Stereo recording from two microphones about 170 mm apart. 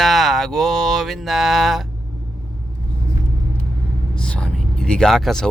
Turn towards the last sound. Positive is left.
turn(degrees=0)  # may be behind; listen again after turning